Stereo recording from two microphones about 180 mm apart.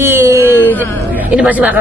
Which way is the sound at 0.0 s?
15° right (ahead or behind).